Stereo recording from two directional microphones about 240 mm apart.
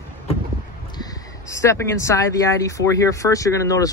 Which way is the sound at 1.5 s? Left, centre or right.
Centre.